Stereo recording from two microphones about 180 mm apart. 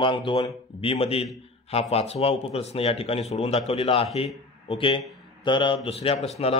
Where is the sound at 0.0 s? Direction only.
25° left (ahead or behind).